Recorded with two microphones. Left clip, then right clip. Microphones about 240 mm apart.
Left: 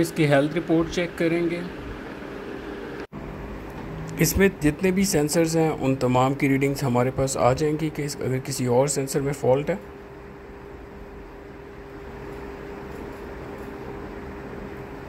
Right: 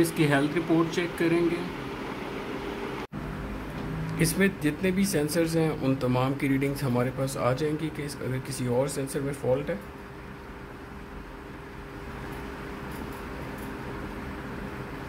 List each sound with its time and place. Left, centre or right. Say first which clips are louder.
0.0 s speech: left 4 dB; centre
4.2 s speech: left 5 dB; centre